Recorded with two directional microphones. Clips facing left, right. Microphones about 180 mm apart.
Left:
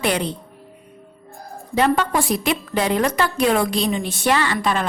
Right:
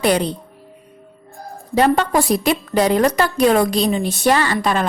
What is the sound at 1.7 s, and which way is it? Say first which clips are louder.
A woman's voice: right 3 dB; 40° right (ahead or behind).